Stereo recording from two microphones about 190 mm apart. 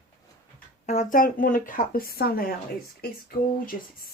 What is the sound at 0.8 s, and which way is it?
Speech, 40° left (ahead or behind).